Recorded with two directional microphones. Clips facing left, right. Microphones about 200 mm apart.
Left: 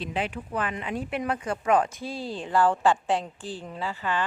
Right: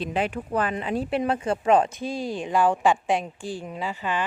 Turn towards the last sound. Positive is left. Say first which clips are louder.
# right 1 dB
turn(degrees=-15)  # may be behind; listen again after turning